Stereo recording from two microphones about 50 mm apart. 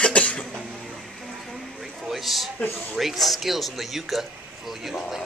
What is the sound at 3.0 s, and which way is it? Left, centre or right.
Speech, centre.